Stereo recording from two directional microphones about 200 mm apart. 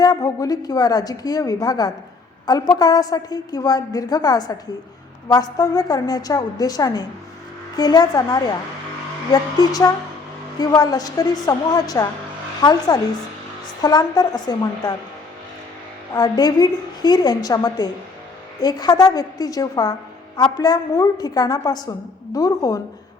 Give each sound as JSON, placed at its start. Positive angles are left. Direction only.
{"t": 0.0, "sound": "a woman's voice", "side_deg": 20}
{"t": 13.8, "sound": "a woman's voice", "side_deg": 20}
{"t": 16.1, "sound": "a woman's voice", "side_deg": 20}